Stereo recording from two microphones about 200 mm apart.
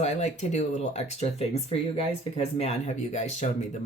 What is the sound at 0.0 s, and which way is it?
Speech, 35° left (ahead or behind).